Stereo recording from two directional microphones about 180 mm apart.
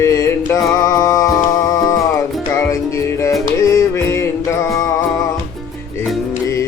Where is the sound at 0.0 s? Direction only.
15° left (ahead or behind).